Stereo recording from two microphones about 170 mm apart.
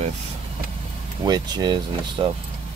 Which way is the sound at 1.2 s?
25° right (ahead or behind).